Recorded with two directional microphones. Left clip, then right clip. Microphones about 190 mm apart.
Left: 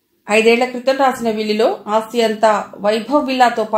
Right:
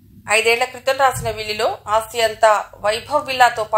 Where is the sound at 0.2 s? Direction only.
35° right (ahead or behind).